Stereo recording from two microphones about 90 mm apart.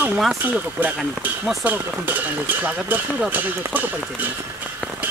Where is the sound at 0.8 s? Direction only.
20° right (ahead or behind).